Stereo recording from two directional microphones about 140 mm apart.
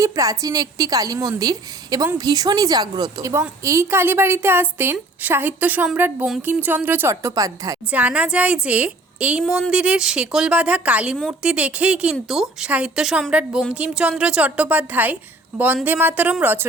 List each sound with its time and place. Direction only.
0.0 s a woman's voice: 25° right (ahead or behind)
7.9 s a woman's voice: 10° right (ahead or behind)